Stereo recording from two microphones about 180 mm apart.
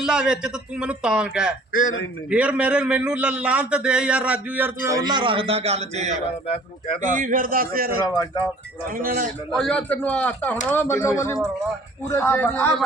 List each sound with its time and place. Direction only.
0.0 s a man's voice: 5° right (ahead or behind); by 7.9 s 55° right (ahead or behind)
8.0 s speech: 20° left (ahead or behind)
8.9 s a man's voice: 50° right (ahead or behind)
9.5 s speech: 5° left (ahead or behind)